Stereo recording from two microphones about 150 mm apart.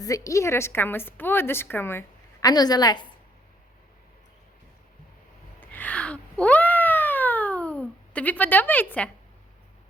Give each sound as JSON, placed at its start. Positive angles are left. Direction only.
{"t": 0.0, "sound": "a woman's voice", "side_deg": 20}
{"t": 2.5, "sound": "a woman's voice", "side_deg": 25}
{"t": 5.5, "sound": "a sound", "side_deg": 10}